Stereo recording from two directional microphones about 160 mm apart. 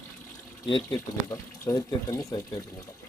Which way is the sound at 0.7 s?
25° left (ahead or behind).